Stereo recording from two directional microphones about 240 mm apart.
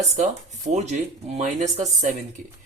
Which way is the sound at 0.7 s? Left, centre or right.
Right.